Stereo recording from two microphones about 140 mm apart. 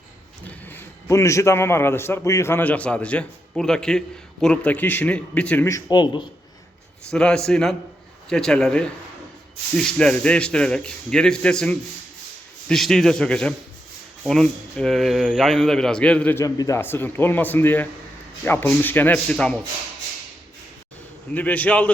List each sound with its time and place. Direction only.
0.4 s a man's voice: 15° left (ahead or behind)
5.6 s speech: 25° left (ahead or behind)
7.1 s a man's voice: 5° left (ahead or behind)
21.3 s a man's voice: 10° left (ahead or behind)